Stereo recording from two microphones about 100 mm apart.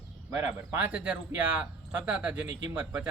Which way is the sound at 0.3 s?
20° right (ahead or behind).